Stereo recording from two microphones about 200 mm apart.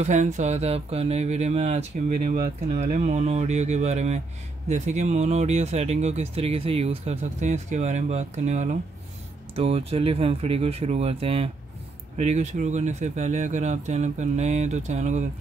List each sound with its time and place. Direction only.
0.0 s speech: 35° right (ahead or behind)